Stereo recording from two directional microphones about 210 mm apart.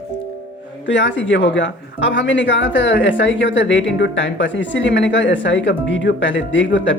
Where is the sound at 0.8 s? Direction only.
60° left (ahead or behind).